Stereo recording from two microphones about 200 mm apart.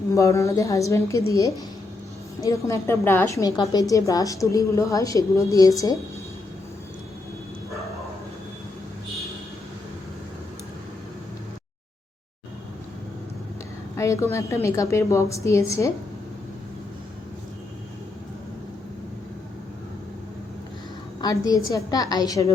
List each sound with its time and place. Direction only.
0.1 s a woman's voice: 15° left (ahead or behind)
13.9 s a woman's voice: 15° left (ahead or behind)
21.2 s a woman's voice: 20° left (ahead or behind)